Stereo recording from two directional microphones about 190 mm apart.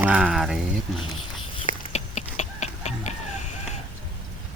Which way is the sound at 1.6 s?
35° left (ahead or behind).